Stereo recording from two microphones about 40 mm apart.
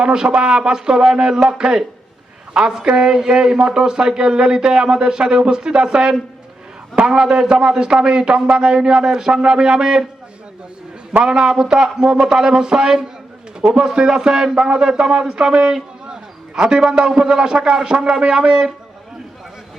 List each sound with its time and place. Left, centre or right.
0.0 s a man's voice: centre
2.8 s a man's voice: centre
11.2 s a man's voice: centre
15.6 s a sound: centre
16.6 s a man's voice: centre